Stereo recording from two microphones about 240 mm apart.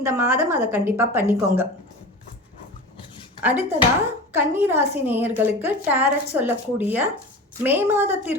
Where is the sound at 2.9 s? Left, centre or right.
Left.